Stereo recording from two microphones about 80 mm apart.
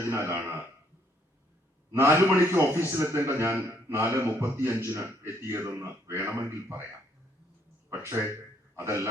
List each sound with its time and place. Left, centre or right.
0.1 s a man's voice: right
1.9 s a man's voice: right
8.0 s a man's voice: right